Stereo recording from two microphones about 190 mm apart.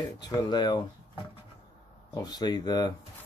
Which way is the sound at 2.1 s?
20° left (ahead or behind).